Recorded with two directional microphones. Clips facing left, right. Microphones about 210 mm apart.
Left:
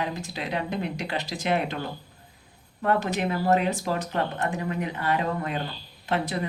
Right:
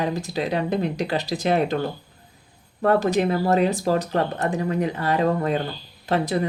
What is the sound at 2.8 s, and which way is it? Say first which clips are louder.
Speech: right 6 dB; 35° right (ahead or behind).